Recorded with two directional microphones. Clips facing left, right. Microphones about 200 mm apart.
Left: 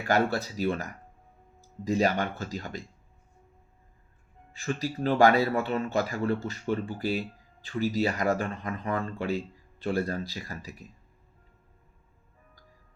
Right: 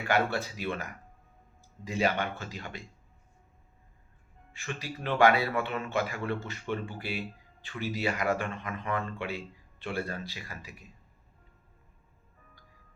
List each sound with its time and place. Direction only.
0.1 s speech: 40° left (ahead or behind)
4.5 s speech: 40° left (ahead or behind)